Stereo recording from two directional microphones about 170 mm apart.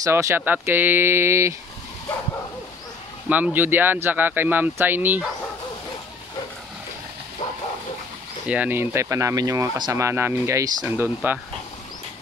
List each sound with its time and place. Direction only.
0.0 s speech: 15° right (ahead or behind)
3.3 s speech: 10° right (ahead or behind)
8.5 s speech: 10° right (ahead or behind)